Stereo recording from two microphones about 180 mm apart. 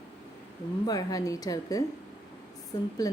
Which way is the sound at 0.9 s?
20° left (ahead or behind).